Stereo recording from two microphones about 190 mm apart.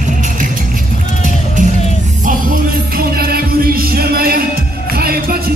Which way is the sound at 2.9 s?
55° right (ahead or behind).